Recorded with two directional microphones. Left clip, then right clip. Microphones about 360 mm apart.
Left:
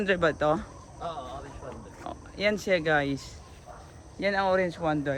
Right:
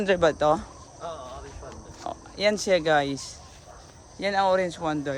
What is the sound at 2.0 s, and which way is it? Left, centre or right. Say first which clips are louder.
Speech: right 4 dB; centre.